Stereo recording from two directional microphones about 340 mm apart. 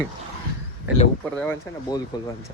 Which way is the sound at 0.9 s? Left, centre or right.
Centre.